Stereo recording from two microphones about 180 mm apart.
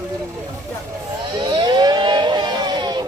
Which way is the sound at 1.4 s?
25° right (ahead or behind).